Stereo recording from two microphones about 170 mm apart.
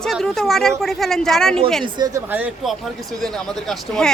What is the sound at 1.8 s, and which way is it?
Speech, 25° right (ahead or behind).